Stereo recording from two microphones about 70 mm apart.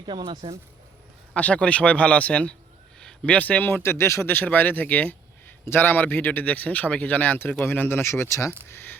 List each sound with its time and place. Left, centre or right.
1.3 s speech: centre
3.0 s a sound: centre
3.3 s speech: left